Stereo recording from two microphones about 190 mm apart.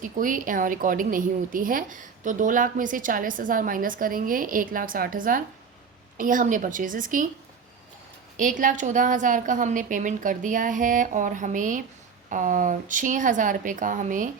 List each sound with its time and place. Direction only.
0.0 s a woman's voice: 45° right (ahead or behind)
8.4 s a woman's voice: 45° right (ahead or behind)